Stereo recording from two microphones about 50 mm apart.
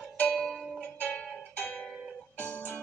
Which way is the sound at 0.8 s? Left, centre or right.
Left.